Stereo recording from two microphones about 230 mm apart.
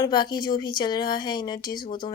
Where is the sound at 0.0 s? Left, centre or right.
Centre.